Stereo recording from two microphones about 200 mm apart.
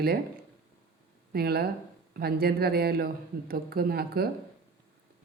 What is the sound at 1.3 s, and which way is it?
A woman's voice, 50° right (ahead or behind).